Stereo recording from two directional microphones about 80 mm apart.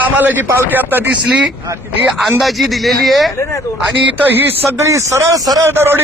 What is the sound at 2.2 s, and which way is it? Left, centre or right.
Speech, centre.